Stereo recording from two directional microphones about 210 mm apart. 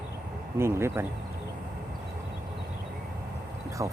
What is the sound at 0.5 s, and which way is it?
Speech, 10° right (ahead or behind).